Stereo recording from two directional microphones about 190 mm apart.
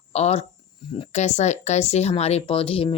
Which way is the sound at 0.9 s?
30° left (ahead or behind).